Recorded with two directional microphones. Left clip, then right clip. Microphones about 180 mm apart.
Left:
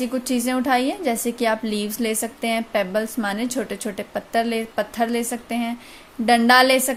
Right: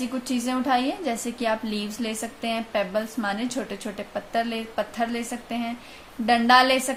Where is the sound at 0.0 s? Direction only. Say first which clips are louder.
Left 5 dB; 40° left (ahead or behind).